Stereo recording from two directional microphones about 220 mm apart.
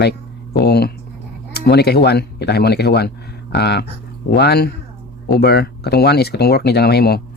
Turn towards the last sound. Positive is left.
turn(degrees=45)  # may be behind; listen again after turning